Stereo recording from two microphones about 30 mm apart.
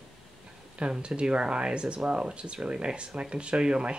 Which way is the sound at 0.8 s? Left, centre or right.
Right.